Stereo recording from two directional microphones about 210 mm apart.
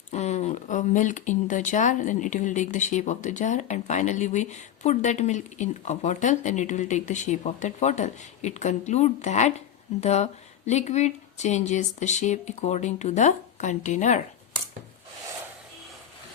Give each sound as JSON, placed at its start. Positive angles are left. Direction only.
{"t": 0.1, "sound": "speech", "side_deg": 30}